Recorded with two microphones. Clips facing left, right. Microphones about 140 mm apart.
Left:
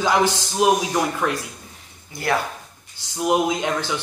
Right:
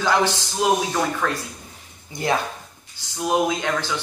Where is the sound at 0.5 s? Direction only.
20° left (ahead or behind).